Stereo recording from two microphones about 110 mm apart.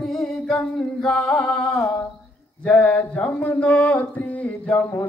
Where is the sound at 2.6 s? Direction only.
15° left (ahead or behind).